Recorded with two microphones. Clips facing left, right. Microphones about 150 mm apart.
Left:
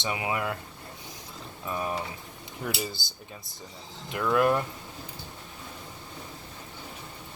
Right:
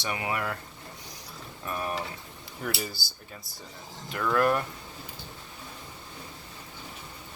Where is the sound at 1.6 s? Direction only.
15° left (ahead or behind).